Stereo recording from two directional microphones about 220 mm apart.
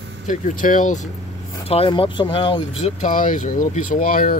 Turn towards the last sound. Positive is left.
turn(degrees=40)  # may be behind; listen again after turning